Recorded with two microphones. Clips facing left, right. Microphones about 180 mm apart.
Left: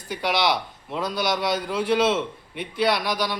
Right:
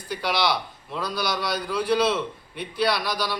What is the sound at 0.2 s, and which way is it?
A man's voice, 20° left (ahead or behind).